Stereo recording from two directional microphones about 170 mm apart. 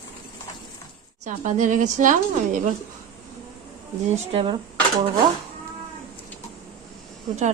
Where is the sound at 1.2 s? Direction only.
45° right (ahead or behind).